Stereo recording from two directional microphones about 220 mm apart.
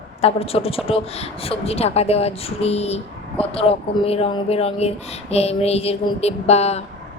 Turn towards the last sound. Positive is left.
turn(degrees=30)  # may be behind; listen again after turning